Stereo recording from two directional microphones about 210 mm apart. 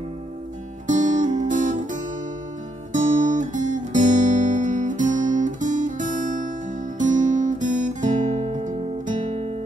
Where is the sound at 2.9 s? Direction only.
35° right (ahead or behind).